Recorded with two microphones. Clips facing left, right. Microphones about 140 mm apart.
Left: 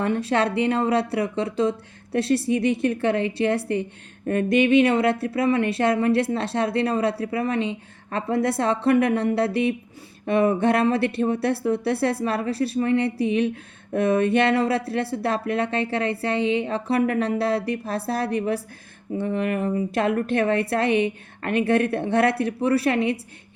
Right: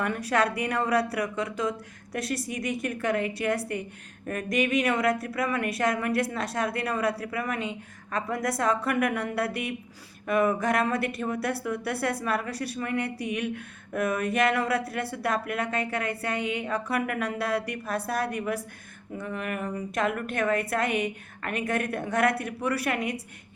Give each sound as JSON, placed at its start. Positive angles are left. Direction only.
{"t": 0.0, "sound": "speech", "side_deg": 25}